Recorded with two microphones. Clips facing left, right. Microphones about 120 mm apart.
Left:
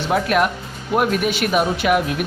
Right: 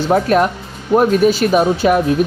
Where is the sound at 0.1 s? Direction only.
35° right (ahead or behind).